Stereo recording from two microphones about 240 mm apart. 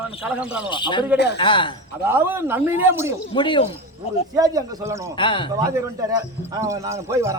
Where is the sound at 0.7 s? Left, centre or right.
Centre.